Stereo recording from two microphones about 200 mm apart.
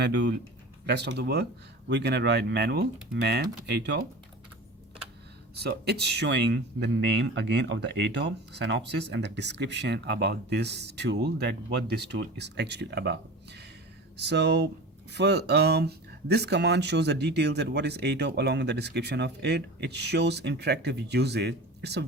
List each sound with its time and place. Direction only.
0.0 s speech: 60° right (ahead or behind)
5.6 s speech: 55° right (ahead or behind)